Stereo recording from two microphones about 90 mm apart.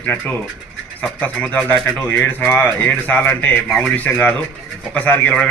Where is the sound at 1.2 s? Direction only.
15° left (ahead or behind).